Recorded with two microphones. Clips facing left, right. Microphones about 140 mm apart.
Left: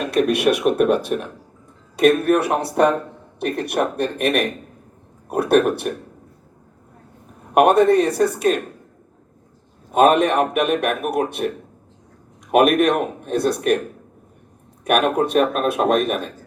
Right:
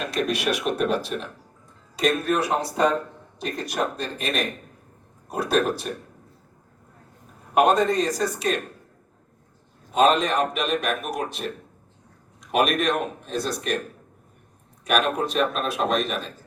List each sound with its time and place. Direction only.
0.1 s a man's voice: 60° left (ahead or behind)
7.5 s a man's voice: 65° left (ahead or behind)
9.9 s a man's voice: 55° left (ahead or behind)
14.8 s a man's voice: 55° left (ahead or behind)